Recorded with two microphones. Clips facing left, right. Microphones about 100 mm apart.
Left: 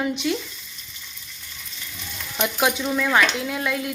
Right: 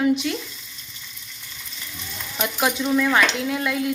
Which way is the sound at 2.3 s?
Centre (ahead or behind).